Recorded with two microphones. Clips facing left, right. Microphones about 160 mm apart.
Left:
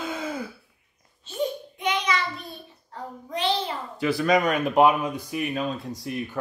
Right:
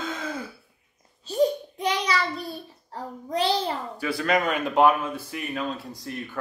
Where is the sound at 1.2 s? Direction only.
35° right (ahead or behind).